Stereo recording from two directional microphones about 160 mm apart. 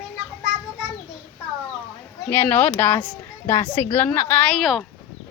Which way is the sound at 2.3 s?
10° left (ahead or behind).